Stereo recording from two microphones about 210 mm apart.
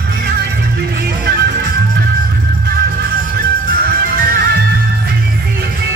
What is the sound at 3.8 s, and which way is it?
Music, 50° right (ahead or behind).